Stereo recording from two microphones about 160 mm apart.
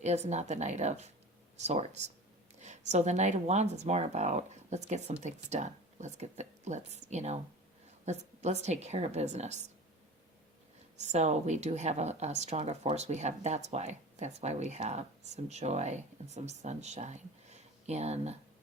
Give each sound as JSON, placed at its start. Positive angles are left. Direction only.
{"t": 0.0, "sound": "a woman's voice", "side_deg": -45}
{"t": 10.9, "sound": "a woman's voice", "side_deg": -45}